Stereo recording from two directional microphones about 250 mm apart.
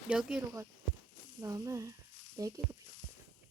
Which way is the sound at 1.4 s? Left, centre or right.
Centre.